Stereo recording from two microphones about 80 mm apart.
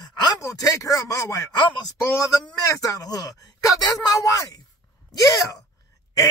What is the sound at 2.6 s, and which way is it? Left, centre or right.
Speech, left.